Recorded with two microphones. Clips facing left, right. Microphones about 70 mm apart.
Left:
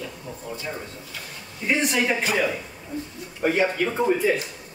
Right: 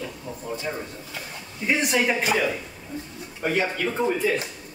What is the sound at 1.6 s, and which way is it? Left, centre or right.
Speech, centre.